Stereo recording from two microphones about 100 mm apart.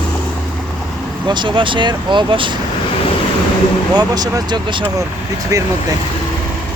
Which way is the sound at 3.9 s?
40° right (ahead or behind).